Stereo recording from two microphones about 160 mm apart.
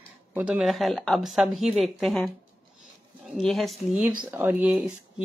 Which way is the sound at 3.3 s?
Centre (ahead or behind).